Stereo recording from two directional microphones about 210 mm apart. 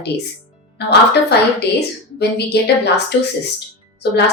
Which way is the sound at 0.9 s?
50° left (ahead or behind).